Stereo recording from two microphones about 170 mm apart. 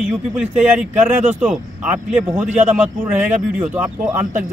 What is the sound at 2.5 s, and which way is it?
Speech, 40° right (ahead or behind).